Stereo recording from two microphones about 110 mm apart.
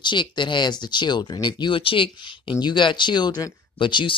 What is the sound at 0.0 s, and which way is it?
Speech, 45° left (ahead or behind).